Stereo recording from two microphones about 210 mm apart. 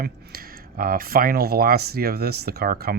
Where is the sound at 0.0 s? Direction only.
45° right (ahead or behind).